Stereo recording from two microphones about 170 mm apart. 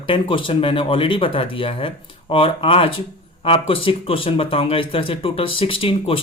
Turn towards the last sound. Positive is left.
turn(degrees=30)  # may be behind; listen again after turning